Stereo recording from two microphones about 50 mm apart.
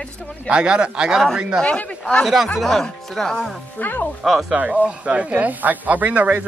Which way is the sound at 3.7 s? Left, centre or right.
Left.